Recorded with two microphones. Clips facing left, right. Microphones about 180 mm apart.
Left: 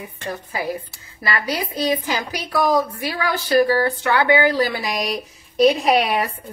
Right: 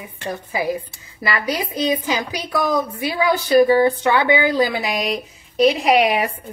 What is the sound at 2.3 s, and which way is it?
A woman's voice, 15° right (ahead or behind).